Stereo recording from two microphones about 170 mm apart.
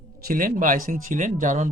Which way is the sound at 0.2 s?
60° right (ahead or behind).